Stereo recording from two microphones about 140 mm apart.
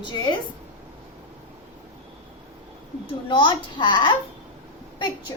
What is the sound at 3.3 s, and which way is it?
Speech, 35° left (ahead or behind).